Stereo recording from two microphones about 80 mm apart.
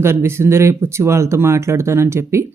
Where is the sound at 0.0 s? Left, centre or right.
Right.